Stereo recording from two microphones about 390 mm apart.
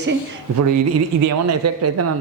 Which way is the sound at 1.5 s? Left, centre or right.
Right.